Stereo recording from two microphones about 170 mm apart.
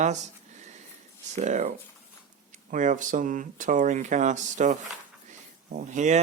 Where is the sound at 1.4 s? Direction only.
45° right (ahead or behind).